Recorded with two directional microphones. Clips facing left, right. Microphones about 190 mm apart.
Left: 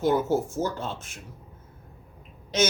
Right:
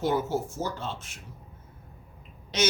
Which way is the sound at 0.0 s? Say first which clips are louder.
Left 4 dB; 50° left (ahead or behind).